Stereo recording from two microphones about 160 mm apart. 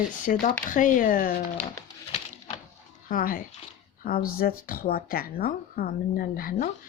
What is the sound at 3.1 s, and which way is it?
Speech, 60° left (ahead or behind).